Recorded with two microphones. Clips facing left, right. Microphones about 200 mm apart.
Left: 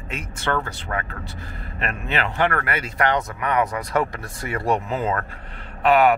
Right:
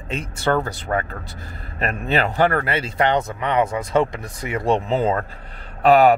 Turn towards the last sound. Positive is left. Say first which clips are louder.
# right 3 dB
turn(degrees=-35)  # may be behind; listen again after turning